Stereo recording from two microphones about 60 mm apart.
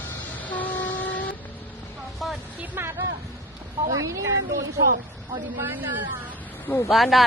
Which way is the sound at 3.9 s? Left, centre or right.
Right.